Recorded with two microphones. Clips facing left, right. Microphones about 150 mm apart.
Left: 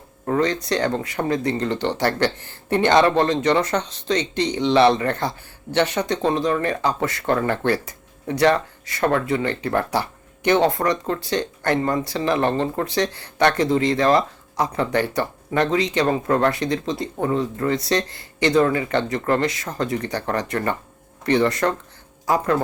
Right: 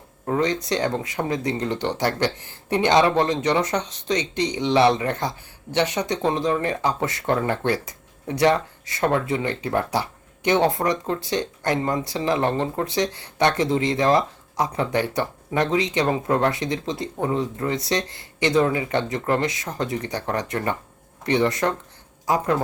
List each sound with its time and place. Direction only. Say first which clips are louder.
0.3 s speech: left 2 dB; 15° right (ahead or behind)